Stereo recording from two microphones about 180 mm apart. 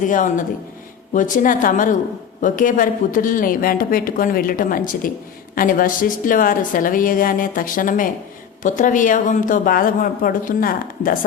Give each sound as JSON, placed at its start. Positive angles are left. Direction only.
{"t": 0.0, "sound": "speech", "side_deg": 45}